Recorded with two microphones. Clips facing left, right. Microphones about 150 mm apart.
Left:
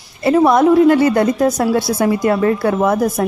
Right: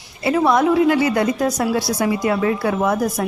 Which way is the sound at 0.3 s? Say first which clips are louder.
Left 5 dB; 50° left (ahead or behind).